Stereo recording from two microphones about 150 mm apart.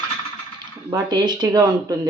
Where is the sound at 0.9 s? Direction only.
25° right (ahead or behind).